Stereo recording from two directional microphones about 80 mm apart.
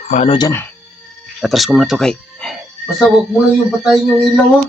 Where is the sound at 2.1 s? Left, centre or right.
Centre.